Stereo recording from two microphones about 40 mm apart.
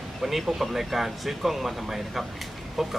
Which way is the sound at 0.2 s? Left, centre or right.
Centre.